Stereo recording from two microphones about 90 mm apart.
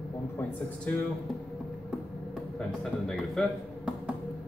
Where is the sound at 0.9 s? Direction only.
15° left (ahead or behind).